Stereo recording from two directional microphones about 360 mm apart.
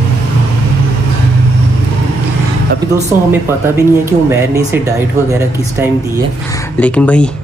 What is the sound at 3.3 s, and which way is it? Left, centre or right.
Speech, centre.